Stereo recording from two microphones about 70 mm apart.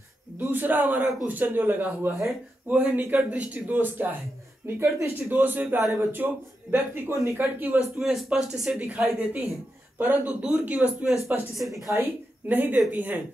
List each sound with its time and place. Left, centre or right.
0.4 s speech: right
4.6 s speech: right
5.3 s speech: right
8.0 s speech: centre
8.7 s speech: centre
11.8 s speech: right
12.4 s speech: right